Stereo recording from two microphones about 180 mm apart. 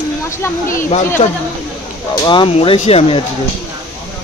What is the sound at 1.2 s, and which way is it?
A man's voice, 30° left (ahead or behind).